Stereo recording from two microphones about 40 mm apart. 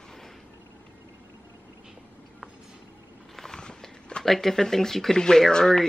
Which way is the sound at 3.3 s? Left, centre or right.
Centre.